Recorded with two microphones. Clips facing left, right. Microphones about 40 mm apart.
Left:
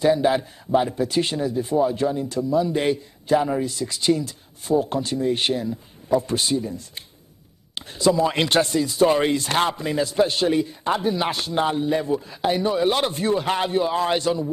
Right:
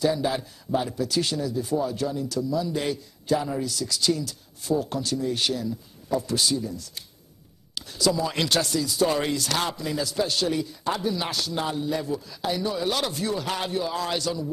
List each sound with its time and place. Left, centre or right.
0.0 s a man's voice: left